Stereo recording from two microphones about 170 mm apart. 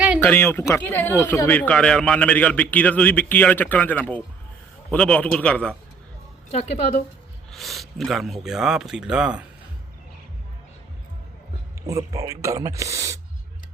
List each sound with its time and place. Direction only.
0.2 s speech: 10° left (ahead or behind)
6.5 s a woman's voice: 40° left (ahead or behind)
7.5 s speech: centre (ahead or behind)
11.9 s speech: 20° right (ahead or behind)